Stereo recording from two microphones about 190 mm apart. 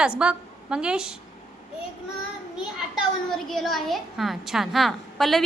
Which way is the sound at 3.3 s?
Centre (ahead or behind).